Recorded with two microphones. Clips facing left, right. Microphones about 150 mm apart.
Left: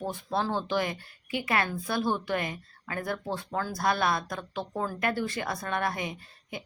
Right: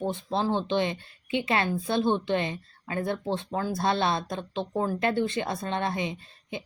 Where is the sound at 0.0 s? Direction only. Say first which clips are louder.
Right 3 dB; 20° right (ahead or behind).